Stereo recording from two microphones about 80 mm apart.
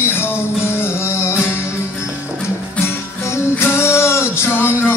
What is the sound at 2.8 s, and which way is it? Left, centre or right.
Music, left.